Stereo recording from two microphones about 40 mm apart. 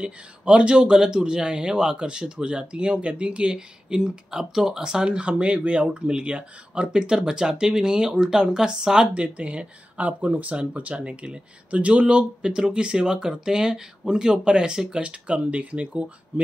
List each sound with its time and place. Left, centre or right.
0.0 s speech: right
5.0 s speech: right
9.1 s speech: right